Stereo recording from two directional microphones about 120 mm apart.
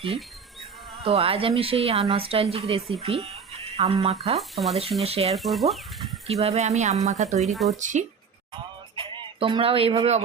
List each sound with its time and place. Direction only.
1.0 s speech: 55° right (ahead or behind)
4.4 s speech: centre (ahead or behind)
4.7 s speech: 55° right (ahead or behind)
5.3 s speech: centre (ahead or behind)
6.2 s speech: 60° right (ahead or behind)
7.8 s speech: 90° right
9.0 s speech: 45° right (ahead or behind)